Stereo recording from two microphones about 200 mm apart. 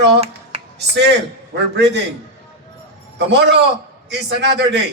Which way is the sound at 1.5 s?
60° right (ahead or behind).